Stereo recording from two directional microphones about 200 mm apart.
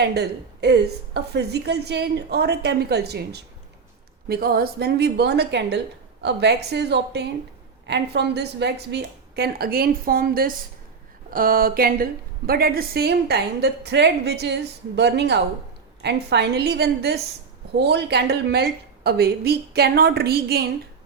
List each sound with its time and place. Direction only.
0.0 s a woman's voice: 55° right (ahead or behind)